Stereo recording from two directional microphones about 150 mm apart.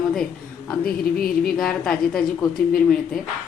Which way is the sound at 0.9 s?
75° left (ahead or behind).